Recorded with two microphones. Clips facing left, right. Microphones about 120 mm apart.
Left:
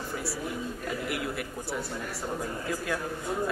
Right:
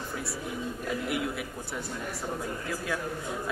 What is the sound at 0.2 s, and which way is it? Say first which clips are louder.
Speech: left 1 dB; centre (ahead or behind).